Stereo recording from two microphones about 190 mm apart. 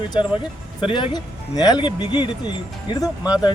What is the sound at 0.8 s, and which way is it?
Speech, 25° left (ahead or behind).